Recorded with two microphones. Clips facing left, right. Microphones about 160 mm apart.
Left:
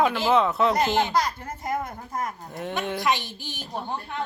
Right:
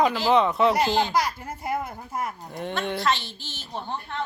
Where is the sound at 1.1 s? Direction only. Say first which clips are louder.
Even; 10° right (ahead or behind).